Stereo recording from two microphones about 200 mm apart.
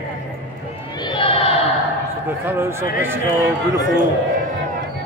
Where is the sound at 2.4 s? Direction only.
10° right (ahead or behind).